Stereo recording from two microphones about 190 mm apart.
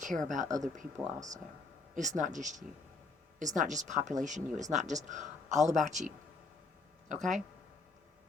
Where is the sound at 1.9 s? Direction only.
40° right (ahead or behind).